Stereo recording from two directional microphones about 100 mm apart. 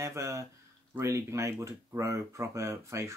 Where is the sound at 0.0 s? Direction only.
30° right (ahead or behind).